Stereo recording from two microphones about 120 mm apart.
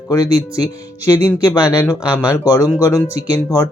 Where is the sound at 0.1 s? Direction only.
30° left (ahead or behind).